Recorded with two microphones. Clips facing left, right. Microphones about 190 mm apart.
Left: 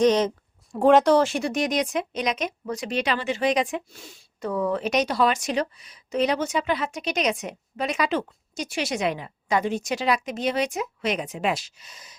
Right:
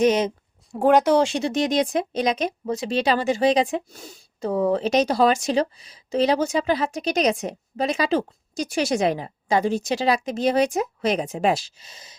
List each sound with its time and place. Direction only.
0.0 s a woman's voice: 10° right (ahead or behind); by 12.1 s 30° right (ahead or behind)